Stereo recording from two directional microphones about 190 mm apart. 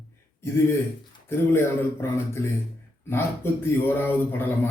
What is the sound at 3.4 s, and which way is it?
Speech, 15° left (ahead or behind).